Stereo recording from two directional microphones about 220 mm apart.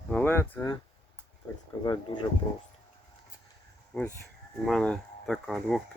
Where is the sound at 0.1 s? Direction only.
10° left (ahead or behind).